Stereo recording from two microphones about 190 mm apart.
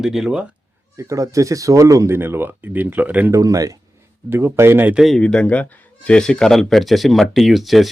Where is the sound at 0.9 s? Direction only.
15° right (ahead or behind).